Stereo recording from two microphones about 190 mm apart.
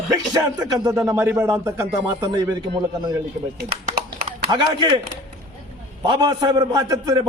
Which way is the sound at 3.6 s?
55° right (ahead or behind).